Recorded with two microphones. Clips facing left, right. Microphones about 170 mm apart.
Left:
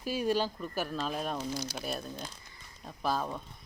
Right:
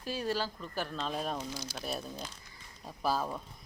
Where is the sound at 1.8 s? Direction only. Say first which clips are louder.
Left 1 dB; centre (ahead or behind).